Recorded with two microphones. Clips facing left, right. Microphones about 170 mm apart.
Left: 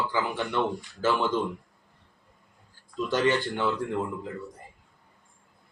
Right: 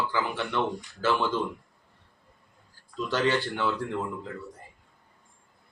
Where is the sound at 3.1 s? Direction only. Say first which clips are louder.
Left 1 dB; 15° left (ahead or behind).